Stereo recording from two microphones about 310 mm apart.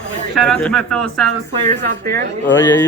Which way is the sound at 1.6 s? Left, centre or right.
Right.